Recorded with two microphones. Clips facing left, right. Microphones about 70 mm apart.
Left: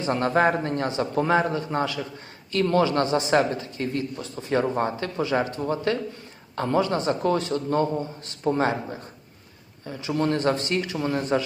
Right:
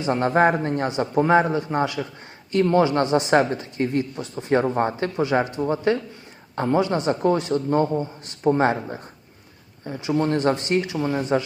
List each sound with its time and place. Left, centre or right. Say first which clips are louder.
0.0 s a woman's voice: right 3 dB; right
10.9 s speech: right 2 dB; centre